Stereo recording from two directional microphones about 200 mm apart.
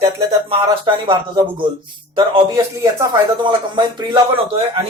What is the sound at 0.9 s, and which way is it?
Speech, 25° right (ahead or behind).